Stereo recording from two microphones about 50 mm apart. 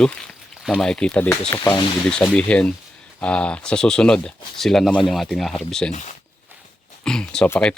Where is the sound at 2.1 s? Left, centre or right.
Centre.